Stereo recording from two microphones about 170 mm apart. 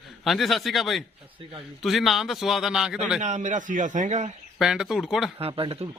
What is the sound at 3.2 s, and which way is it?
A man's voice, 45° right (ahead or behind).